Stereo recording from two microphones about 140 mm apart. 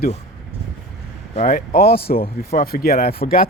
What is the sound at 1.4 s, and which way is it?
Speech, 85° left.